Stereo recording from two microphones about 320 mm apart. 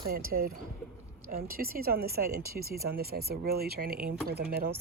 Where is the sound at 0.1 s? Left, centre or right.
Right.